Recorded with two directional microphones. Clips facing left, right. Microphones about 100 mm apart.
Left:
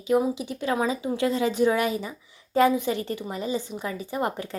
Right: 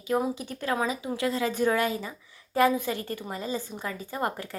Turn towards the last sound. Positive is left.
turn(degrees=20)  # may be behind; listen again after turning